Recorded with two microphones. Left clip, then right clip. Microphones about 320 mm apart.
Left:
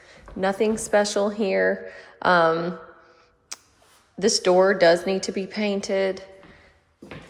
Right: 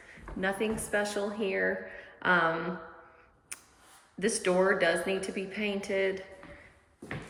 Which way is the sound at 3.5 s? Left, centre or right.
Centre.